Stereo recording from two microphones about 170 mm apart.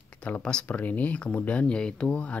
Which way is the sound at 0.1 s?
5° left (ahead or behind).